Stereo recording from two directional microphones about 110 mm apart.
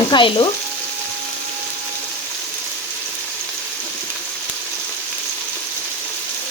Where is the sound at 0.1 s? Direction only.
50° left (ahead or behind).